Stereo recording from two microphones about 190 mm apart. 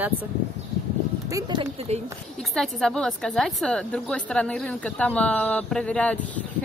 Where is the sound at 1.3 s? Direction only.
25° right (ahead or behind).